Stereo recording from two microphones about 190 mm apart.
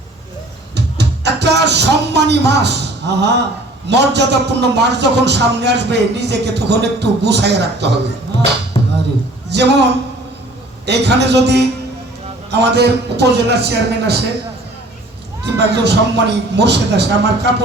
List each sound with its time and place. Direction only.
0.9 s music: 65° right (ahead or behind)
3.8 s a man's voice: 65° right (ahead or behind)
8.7 s music: 25° left (ahead or behind)
9.5 s a man's voice: 65° right (ahead or behind)
15.4 s a man's voice: 60° right (ahead or behind)